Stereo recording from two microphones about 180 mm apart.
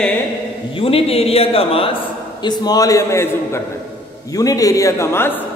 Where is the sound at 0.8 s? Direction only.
30° left (ahead or behind).